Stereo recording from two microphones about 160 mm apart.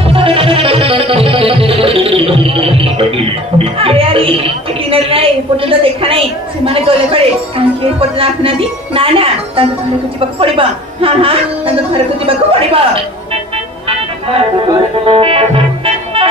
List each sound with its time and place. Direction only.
0.1 s music: 35° right (ahead or behind)
4.9 s a woman's voice: 35° right (ahead or behind)
15.0 s music: 35° right (ahead or behind)